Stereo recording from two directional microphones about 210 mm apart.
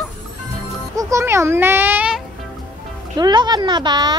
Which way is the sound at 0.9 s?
15° right (ahead or behind).